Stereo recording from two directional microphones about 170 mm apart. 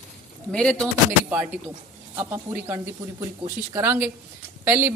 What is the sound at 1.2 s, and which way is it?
A man's voice, 5° right (ahead or behind).